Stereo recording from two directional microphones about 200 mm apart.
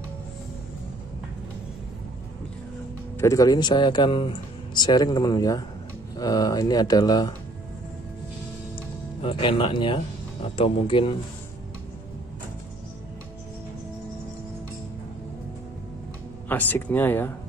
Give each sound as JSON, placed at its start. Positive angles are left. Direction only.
{"t": 3.2, "sound": "speech", "side_deg": 15}
{"t": 9.2, "sound": "speech", "side_deg": 25}
{"t": 16.4, "sound": "speech", "side_deg": 10}